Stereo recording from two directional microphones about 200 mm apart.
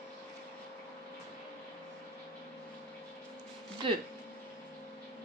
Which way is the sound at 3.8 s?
25° right (ahead or behind).